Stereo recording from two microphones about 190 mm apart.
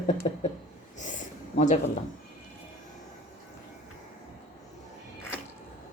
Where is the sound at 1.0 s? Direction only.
40° left (ahead or behind).